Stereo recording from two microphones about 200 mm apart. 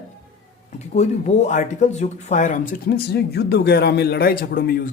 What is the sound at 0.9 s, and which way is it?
Speech, 35° left (ahead or behind).